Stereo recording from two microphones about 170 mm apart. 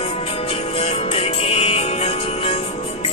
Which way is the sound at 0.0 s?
35° left (ahead or behind).